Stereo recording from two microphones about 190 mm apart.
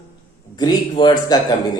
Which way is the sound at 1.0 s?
20° left (ahead or behind).